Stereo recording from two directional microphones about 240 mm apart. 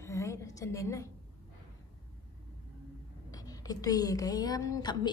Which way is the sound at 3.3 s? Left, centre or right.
Centre.